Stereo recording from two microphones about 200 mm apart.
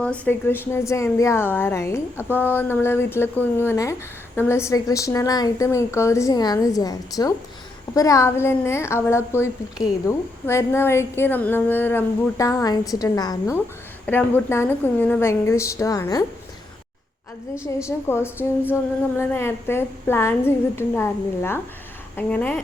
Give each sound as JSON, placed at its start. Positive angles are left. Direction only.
{"t": 0.0, "sound": "a woman's voice", "side_deg": 10}
{"t": 17.8, "sound": "a woman's voice", "side_deg": 10}